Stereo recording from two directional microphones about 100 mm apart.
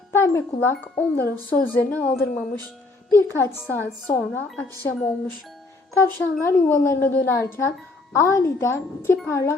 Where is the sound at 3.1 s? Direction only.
25° left (ahead or behind).